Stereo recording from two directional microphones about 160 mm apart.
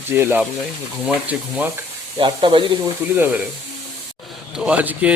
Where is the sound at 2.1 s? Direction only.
30° right (ahead or behind).